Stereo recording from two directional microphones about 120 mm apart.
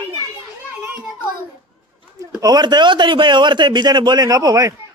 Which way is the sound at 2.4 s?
35° right (ahead or behind).